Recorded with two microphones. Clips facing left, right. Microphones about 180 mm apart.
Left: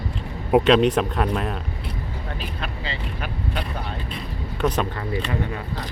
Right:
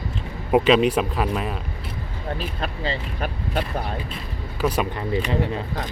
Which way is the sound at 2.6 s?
40° right (ahead or behind).